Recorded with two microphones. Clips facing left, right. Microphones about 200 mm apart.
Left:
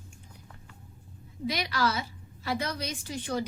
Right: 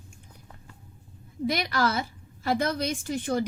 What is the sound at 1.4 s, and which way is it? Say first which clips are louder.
A woman's voice: right 3 dB; 50° right (ahead or behind).